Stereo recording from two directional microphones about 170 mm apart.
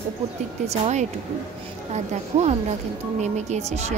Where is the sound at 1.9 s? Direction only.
40° right (ahead or behind).